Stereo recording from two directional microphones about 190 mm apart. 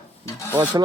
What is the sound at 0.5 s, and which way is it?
Speech, 10° right (ahead or behind).